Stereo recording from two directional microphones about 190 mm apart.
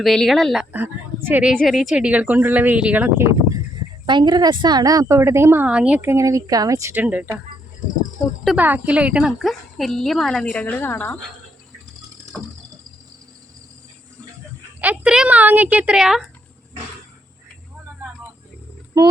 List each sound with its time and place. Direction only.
0.0 s a woman's voice: centre (ahead or behind)
4.0 s a woman's voice: 25° right (ahead or behind); by 7.3 s 10° right (ahead or behind)
8.4 s speech: 10° right (ahead or behind); by 11.2 s 10° left (ahead or behind)
14.8 s a woman's voice: 5° right (ahead or behind)
19.0 s speech: 15° right (ahead or behind)